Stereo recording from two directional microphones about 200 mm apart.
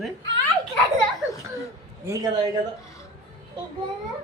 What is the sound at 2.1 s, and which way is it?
Speech, 20° right (ahead or behind).